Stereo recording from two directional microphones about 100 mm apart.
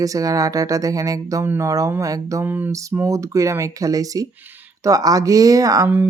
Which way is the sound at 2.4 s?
20° right (ahead or behind).